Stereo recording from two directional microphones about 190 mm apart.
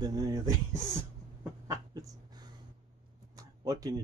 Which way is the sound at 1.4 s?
15° right (ahead or behind).